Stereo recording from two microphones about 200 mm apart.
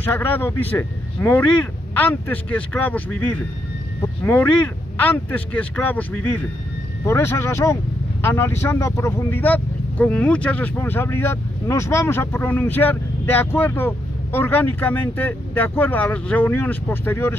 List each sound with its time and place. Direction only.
0.0 s speech: 10° left (ahead or behind)